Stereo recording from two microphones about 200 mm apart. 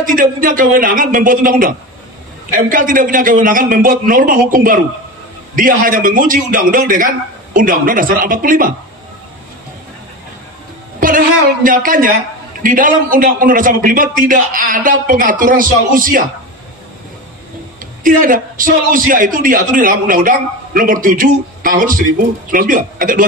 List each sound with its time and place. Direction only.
0.0 s a man's voice: 45° right (ahead or behind)
11.0 s a woman's voice: 45° right (ahead or behind)
18.0 s a man's voice: 45° right (ahead or behind)